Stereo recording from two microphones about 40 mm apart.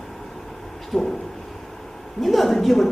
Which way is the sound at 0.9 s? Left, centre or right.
Centre.